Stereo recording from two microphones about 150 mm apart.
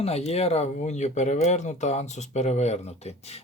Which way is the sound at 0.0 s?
45° left (ahead or behind).